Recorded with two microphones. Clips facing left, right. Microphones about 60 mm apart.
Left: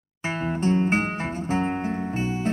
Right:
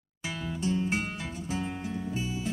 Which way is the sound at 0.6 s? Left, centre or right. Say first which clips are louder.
Left 7 dB; left.